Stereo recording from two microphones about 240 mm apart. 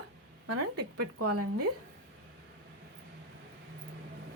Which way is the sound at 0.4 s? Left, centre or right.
Right.